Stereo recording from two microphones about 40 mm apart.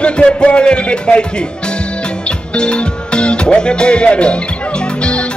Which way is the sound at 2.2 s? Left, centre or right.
Left.